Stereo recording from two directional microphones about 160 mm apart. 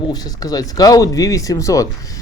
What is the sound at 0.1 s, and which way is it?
Speech, 25° left (ahead or behind).